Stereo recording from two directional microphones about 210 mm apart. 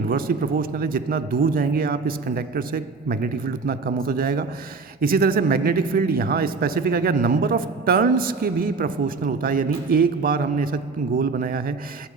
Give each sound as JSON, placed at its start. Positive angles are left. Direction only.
{"t": 0.1, "sound": "speech", "side_deg": -45}